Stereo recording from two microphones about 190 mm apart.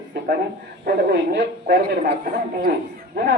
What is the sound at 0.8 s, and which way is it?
A man's voice, 60° right (ahead or behind).